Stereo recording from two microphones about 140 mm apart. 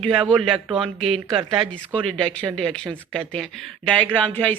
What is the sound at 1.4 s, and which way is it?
Speech, 20° right (ahead or behind).